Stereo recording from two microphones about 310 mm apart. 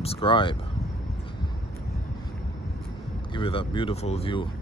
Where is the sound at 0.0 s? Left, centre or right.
Centre.